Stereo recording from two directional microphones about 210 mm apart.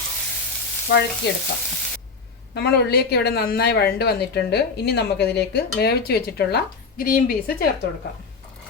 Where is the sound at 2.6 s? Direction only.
50° left (ahead or behind).